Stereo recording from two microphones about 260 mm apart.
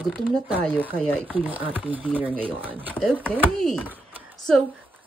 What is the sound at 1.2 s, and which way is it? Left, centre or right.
Speech, centre.